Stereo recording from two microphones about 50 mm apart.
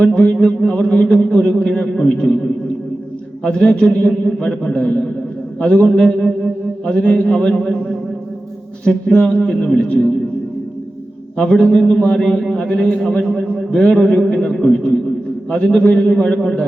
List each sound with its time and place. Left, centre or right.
0.0 s a man's voice: centre
11.3 s a man's voice: centre